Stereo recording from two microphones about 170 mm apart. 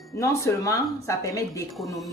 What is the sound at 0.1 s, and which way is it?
Speech, 20° left (ahead or behind).